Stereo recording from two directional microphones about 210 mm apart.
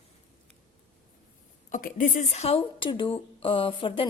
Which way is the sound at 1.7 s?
40° left (ahead or behind).